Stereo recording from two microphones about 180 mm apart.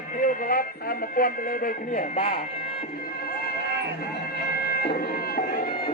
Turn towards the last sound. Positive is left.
turn(degrees=55)  # may be behind; listen again after turning